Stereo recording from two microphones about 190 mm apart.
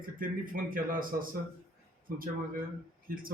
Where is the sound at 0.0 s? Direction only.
45° right (ahead or behind).